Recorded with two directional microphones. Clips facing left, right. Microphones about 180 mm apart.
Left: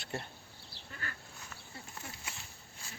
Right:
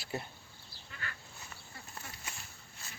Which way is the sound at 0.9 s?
40° left (ahead or behind).